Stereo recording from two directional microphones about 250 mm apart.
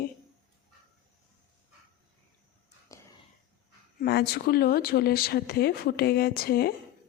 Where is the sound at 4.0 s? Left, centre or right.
Left.